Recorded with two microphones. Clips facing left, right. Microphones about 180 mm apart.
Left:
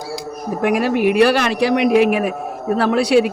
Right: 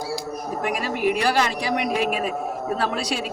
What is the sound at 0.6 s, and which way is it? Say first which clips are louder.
A man's voice: left 8 dB; 70° left (ahead or behind).